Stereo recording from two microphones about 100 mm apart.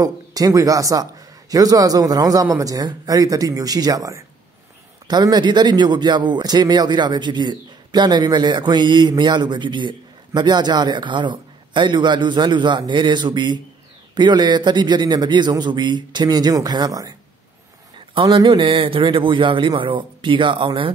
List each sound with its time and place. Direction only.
0.0 s a man's voice: 35° right (ahead or behind)
17.9 s a man's voice: 55° right (ahead or behind)